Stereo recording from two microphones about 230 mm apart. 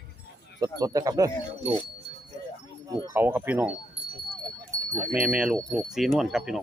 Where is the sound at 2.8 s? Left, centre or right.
Centre.